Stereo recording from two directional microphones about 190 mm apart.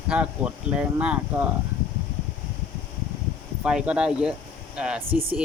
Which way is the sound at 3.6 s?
5° right (ahead or behind).